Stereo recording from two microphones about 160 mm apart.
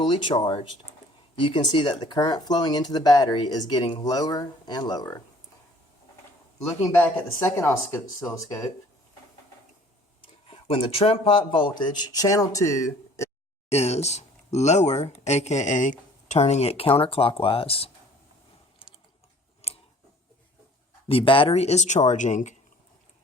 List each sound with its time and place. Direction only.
0.0 s speech: 30° left (ahead or behind)
7.3 s speech: 15° left (ahead or behind)
10.2 s speech: 35° left (ahead or behind); by 13.3 s 20° left (ahead or behind)
13.7 s speech: 40° left (ahead or behind)
21.1 s speech: 35° left (ahead or behind)